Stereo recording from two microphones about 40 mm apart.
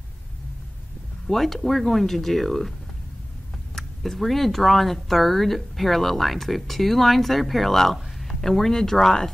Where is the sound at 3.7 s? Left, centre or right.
Centre.